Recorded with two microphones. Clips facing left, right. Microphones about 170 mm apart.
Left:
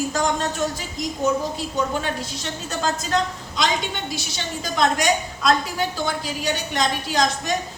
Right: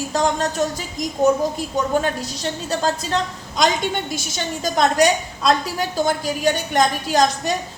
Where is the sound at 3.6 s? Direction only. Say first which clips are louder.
Right 4 dB; 45° right (ahead or behind).